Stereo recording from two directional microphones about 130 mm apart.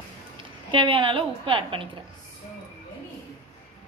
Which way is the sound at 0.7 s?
40° right (ahead or behind).